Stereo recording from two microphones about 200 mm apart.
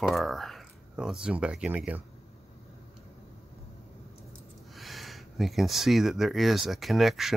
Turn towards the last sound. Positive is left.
turn(degrees=0)  # may be behind; listen again after turning